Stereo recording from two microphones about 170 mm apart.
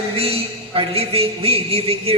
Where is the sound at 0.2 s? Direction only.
35° right (ahead or behind).